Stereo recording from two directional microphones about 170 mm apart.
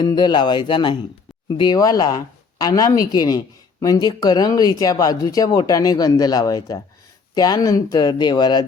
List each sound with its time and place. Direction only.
0.0 s speech: 25° left (ahead or behind)